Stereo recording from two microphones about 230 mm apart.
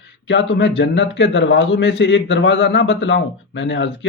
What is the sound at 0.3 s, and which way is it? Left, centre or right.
A man's voice, left.